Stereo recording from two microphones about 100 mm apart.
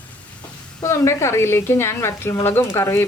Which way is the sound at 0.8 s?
30° left (ahead or behind).